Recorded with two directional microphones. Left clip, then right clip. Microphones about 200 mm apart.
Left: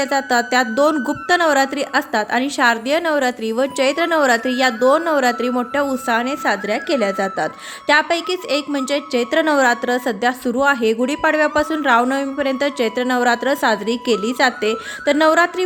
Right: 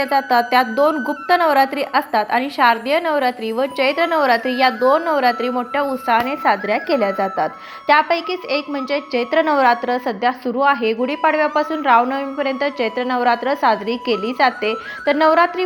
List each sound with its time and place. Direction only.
0.0 s a woman's voice: 20° left (ahead or behind)